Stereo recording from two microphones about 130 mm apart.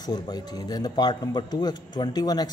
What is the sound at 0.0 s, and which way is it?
A man's voice, 30° left (ahead or behind).